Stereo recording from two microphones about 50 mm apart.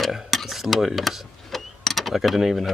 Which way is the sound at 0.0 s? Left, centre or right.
Centre.